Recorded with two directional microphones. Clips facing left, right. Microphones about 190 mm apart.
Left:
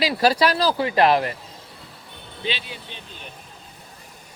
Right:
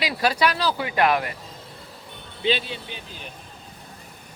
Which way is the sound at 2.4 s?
25° right (ahead or behind).